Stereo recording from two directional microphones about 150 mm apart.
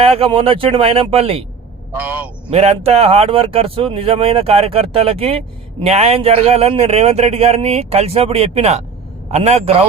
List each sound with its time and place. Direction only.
0.0 s speech: 40° right (ahead or behind)
2.0 s a man's voice: 10° right (ahead or behind)
2.5 s speech: 45° right (ahead or behind)